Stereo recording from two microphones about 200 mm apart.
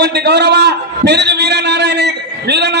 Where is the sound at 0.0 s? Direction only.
55° right (ahead or behind).